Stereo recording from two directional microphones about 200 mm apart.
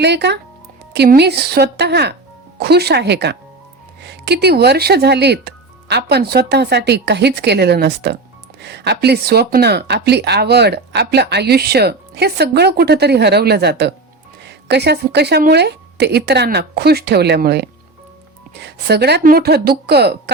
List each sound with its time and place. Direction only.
0.0 s speech: 60° right (ahead or behind)